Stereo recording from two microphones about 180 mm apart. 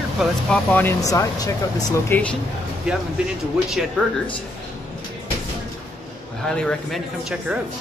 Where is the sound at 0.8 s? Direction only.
15° left (ahead or behind).